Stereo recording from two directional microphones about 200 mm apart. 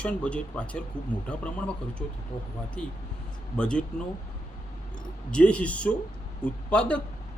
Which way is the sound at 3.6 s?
5° left (ahead or behind).